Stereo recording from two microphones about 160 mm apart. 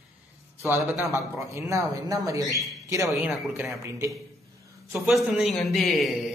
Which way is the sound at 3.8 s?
20° right (ahead or behind).